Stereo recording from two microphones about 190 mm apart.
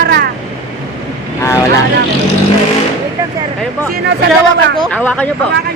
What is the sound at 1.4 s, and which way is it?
Vehicle, 15° left (ahead or behind).